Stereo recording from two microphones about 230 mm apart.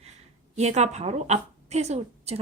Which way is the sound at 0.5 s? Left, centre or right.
Right.